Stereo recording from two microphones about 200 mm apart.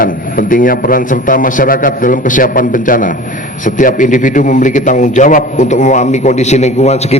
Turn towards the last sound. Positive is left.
turn(degrees=35)  # may be behind; listen again after turning